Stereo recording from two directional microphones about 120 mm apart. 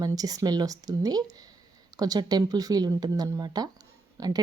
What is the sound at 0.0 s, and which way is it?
Speech, 30° right (ahead or behind).